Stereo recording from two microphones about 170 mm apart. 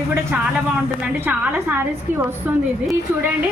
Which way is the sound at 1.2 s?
10° right (ahead or behind).